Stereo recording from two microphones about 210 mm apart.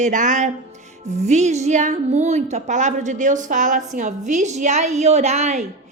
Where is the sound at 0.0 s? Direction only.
35° right (ahead or behind).